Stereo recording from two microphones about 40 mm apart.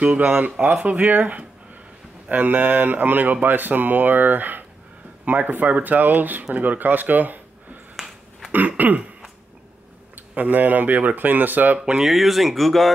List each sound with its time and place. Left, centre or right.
0.4 s speech: right
8.5 s throat clearing: right
10.1 s speech: right
12.0 s speech: centre